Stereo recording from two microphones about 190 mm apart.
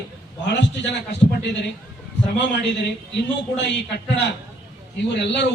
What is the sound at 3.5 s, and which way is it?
Speech, 70° left (ahead or behind).